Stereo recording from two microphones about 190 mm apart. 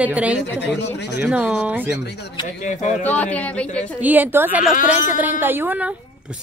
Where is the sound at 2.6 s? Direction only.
40° left (ahead or behind).